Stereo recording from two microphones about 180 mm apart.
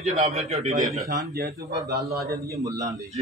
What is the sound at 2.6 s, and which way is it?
Speech, 20° right (ahead or behind).